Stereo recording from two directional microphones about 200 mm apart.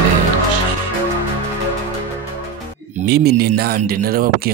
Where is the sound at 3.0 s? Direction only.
55° right (ahead or behind).